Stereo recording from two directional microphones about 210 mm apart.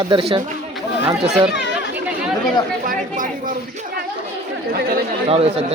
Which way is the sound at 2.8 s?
40° right (ahead or behind).